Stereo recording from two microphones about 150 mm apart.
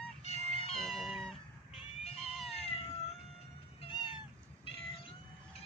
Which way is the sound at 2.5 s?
40° left (ahead or behind).